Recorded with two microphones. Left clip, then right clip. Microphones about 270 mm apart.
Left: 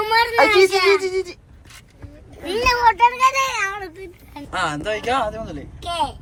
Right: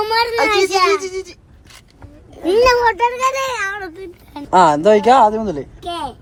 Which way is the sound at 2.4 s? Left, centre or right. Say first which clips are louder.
Right 4 dB; right.